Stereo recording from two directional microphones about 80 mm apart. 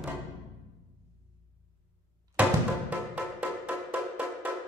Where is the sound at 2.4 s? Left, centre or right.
Centre.